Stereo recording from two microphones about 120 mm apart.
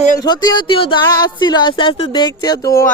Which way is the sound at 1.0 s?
35° left (ahead or behind).